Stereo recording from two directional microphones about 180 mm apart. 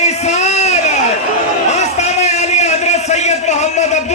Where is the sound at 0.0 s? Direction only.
40° left (ahead or behind).